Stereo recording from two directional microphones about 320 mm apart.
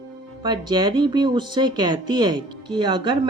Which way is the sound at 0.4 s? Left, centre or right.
Centre.